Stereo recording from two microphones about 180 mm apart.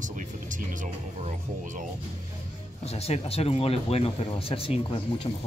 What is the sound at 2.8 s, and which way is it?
Speech, 35° left (ahead or behind).